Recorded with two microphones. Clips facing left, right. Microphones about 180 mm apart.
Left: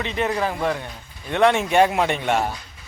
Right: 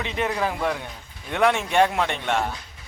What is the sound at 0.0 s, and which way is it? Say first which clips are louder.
Speech: left 2 dB; centre (ahead or behind).